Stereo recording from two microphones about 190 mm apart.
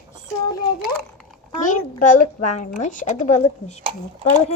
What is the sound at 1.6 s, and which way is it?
A child's voice, 40° left (ahead or behind).